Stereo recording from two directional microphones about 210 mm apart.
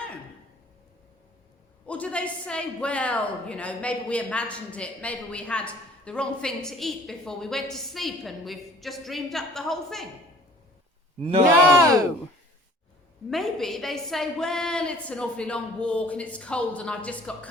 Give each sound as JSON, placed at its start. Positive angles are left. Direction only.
{"t": 1.9, "sound": "speech", "side_deg": 5}
{"t": 11.2, "sound": "speech", "side_deg": -25}
{"t": 11.4, "sound": "speech", "side_deg": -10}
{"t": 13.3, "sound": "speech", "side_deg": 0}